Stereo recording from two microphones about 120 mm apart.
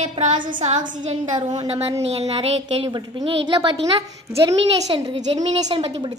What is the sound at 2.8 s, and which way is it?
Speech, 40° right (ahead or behind).